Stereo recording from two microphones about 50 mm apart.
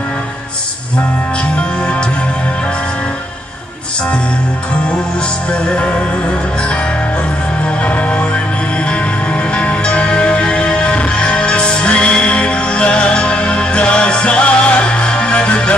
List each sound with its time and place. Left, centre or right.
5.5 s music: left
7.8 s music: left
9.9 s music: left